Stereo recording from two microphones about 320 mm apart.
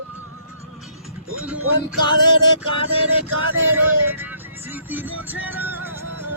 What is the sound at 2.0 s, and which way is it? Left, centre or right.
Speech, centre.